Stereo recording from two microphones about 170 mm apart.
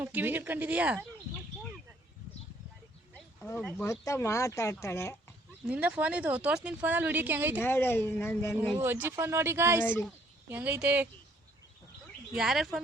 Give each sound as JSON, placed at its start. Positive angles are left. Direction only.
{"t": 0.0, "sound": "speech", "side_deg": -10}
{"t": 3.6, "sound": "speech", "side_deg": 10}
{"t": 5.6, "sound": "speech", "side_deg": -5}
{"t": 7.6, "sound": "speech", "side_deg": 15}
{"t": 8.8, "sound": "speech", "side_deg": -10}
{"t": 12.3, "sound": "speech", "side_deg": -5}